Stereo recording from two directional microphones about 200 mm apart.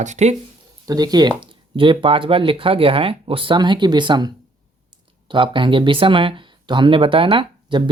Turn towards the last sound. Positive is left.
turn(degrees=-25)  # may be behind; listen again after turning